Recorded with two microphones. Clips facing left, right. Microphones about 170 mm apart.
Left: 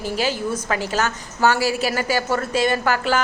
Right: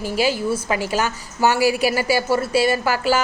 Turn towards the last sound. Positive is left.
turn(degrees=-10)  # may be behind; listen again after turning